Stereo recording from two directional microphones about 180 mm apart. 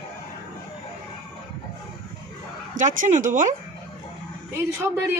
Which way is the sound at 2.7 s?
45° right (ahead or behind).